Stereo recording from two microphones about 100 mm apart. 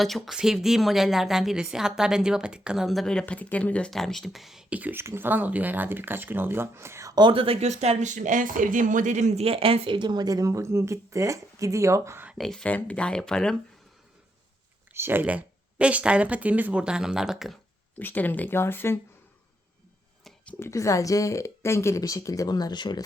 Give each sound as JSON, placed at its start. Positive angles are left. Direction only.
{"t": 0.0, "sound": "a woman's voice", "side_deg": 0}
{"t": 4.7, "sound": "speech", "side_deg": -15}
{"t": 7.2, "sound": "speech", "side_deg": -60}
{"t": 9.3, "sound": "speech", "side_deg": -80}
{"t": 12.4, "sound": "speech", "side_deg": 5}
{"t": 14.9, "sound": "speech", "side_deg": -20}
{"t": 18.0, "sound": "speech", "side_deg": 15}
{"t": 20.2, "sound": "a sound", "side_deg": 10}
{"t": 20.6, "sound": "speech", "side_deg": 30}